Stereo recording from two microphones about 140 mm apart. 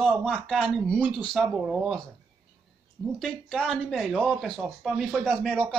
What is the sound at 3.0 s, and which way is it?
A man's voice, 5° left (ahead or behind).